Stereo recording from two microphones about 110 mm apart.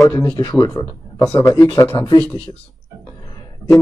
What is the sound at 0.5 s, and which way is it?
Speech, 30° left (ahead or behind).